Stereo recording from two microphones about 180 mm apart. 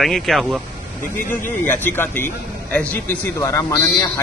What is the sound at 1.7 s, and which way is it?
A man's voice, 10° left (ahead or behind).